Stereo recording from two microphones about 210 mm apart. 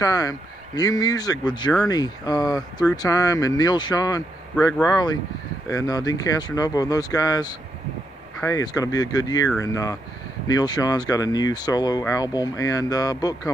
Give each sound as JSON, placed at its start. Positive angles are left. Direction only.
{"t": 0.0, "sound": "speech", "side_deg": 15}